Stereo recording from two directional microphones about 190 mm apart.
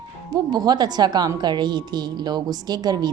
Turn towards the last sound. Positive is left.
turn(degrees=-20)  # may be behind; listen again after turning